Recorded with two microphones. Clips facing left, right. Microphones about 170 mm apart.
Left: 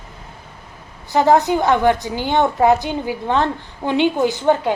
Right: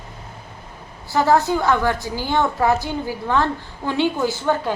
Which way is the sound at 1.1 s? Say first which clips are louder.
Left 3 dB; 20° left (ahead or behind).